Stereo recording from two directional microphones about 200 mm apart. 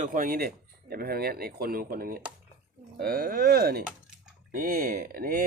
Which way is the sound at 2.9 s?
50° right (ahead or behind).